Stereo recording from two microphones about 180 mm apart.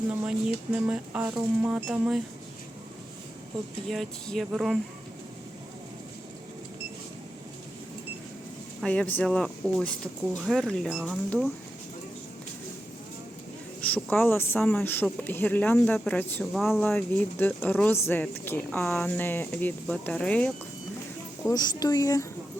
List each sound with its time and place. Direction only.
0.3 s speech: 5° right (ahead or behind)
3.8 s speech: centre (ahead or behind)
8.8 s speech: 5° left (ahead or behind)
13.8 s speech: 10° left (ahead or behind)
16.8 s speech: 10° left (ahead or behind)
21.5 s speech: 20° left (ahead or behind)